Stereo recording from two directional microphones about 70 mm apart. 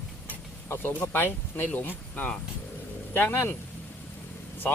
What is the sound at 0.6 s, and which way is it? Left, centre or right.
Speech, left.